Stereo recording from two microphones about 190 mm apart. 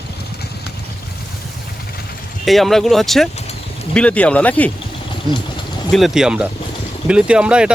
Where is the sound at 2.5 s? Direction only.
Centre (ahead or behind).